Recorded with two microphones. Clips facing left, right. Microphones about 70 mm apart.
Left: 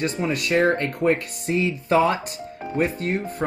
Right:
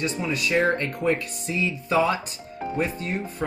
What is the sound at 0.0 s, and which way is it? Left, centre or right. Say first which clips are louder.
Speech: left 2 dB; left.